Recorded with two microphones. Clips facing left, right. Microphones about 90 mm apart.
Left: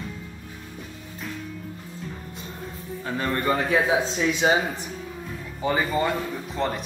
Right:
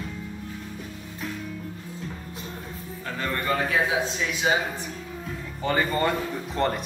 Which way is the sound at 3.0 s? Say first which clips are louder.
Left 3 dB; 20° left (ahead or behind).